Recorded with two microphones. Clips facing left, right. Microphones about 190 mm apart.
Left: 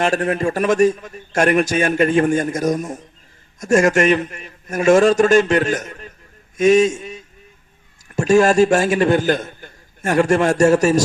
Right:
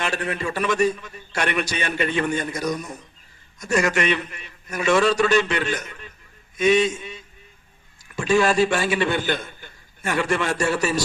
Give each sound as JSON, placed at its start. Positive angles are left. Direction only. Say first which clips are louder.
{"t": 0.0, "sound": "a man's voice", "louder": "left 8 dB", "side_deg": 45}